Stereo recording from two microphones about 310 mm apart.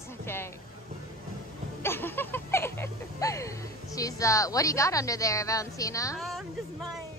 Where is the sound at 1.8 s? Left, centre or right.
Centre.